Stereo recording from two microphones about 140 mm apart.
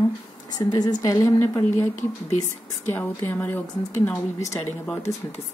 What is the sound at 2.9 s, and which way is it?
A woman's voice, 15° left (ahead or behind).